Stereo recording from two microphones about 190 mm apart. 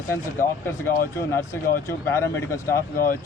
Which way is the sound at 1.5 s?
15° left (ahead or behind).